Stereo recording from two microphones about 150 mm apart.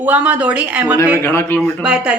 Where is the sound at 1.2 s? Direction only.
15° left (ahead or behind).